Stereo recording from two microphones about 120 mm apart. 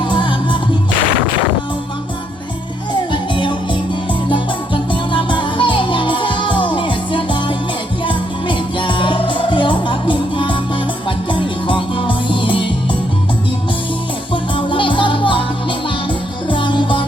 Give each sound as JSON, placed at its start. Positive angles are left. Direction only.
{"t": 0.0, "sound": "music", "side_deg": 40}
{"t": 2.9, "sound": "music", "side_deg": 40}
{"t": 14.5, "sound": "music", "side_deg": 45}
{"t": 16.5, "sound": "music", "side_deg": 45}